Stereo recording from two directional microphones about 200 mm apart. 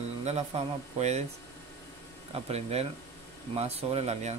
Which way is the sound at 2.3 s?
30° right (ahead or behind).